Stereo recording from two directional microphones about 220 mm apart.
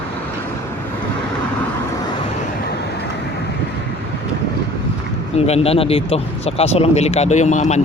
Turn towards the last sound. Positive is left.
turn(degrees=30)  # may be behind; listen again after turning